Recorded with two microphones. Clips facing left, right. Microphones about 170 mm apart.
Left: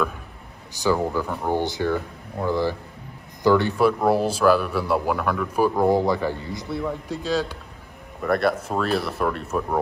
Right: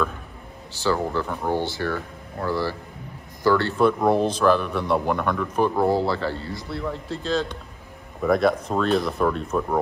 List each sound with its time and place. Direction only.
0.8 s speech: 10° left (ahead or behind)
3.7 s speech: 5° left (ahead or behind)
5.9 s speech: 15° left (ahead or behind)
8.2 s speech: centre (ahead or behind)